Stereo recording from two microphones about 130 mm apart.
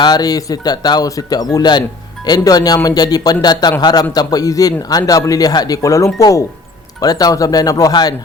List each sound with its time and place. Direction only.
0.0 s speech: 30° left (ahead or behind)